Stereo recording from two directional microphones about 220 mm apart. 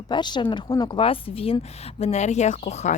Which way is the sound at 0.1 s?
20° left (ahead or behind).